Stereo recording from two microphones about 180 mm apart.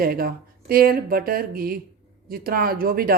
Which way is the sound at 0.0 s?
55° right (ahead or behind).